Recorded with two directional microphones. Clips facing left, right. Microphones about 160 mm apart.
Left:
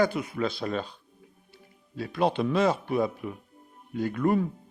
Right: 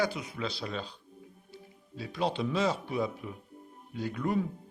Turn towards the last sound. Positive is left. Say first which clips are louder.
# left 6 dB
turn(degrees=55)  # may be behind; listen again after turning